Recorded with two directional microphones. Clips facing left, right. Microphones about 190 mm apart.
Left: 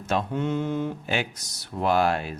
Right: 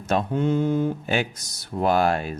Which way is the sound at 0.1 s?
35° right (ahead or behind).